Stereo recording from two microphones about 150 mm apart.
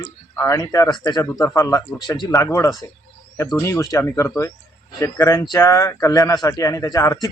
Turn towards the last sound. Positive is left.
turn(degrees=25)  # may be behind; listen again after turning